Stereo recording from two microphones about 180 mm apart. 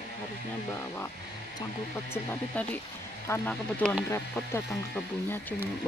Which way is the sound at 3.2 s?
10° left (ahead or behind).